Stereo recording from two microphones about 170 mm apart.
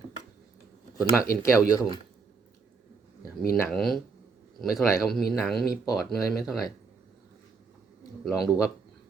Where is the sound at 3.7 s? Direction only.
Centre (ahead or behind).